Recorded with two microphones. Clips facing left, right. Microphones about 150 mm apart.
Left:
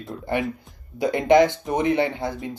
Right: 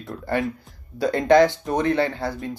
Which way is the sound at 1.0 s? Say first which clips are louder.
Right 1 dB; 20° left (ahead or behind).